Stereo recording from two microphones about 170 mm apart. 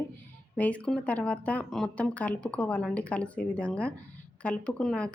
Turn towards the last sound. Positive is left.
turn(degrees=5)  # may be behind; listen again after turning